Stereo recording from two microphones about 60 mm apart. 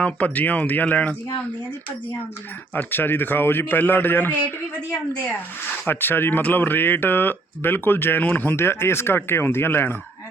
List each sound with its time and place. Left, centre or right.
0.0 s speech: left
2.7 s speech: left
5.9 s speech: left
8.2 s speech: left
8.4 s speech: left